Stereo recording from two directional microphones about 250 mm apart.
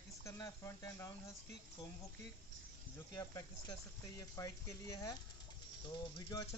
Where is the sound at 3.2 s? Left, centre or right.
Centre.